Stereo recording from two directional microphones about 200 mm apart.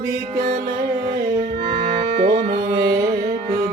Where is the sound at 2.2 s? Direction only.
35° right (ahead or behind).